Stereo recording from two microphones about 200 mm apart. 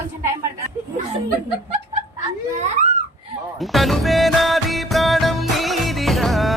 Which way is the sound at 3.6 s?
Centre (ahead or behind).